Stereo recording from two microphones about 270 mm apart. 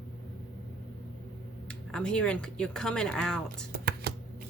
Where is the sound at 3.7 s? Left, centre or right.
Right.